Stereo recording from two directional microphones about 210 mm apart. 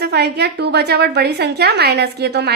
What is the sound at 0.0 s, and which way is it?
A woman's voice, 50° right (ahead or behind).